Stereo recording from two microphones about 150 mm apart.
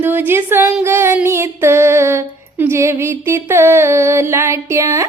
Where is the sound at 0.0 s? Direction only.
15° right (ahead or behind).